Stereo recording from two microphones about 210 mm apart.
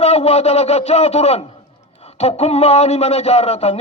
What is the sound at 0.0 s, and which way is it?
A man's voice, 30° left (ahead or behind).